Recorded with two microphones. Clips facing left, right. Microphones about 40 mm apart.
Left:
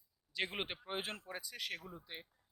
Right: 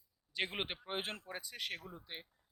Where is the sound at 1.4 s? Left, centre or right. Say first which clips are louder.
Right 1 dB; right.